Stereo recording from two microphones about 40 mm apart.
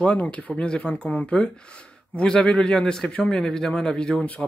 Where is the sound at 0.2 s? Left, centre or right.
Left.